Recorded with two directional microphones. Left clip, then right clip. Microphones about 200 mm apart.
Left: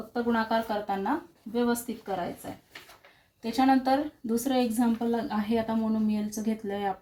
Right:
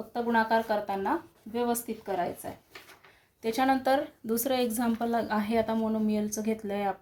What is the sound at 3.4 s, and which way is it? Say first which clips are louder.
Speech: left 2 dB; 35° right (ahead or behind).